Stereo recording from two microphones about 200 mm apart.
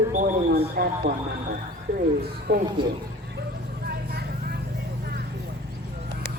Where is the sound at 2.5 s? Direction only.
50° right (ahead or behind).